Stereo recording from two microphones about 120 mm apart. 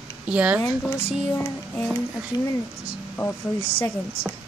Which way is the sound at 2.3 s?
35° left (ahead or behind).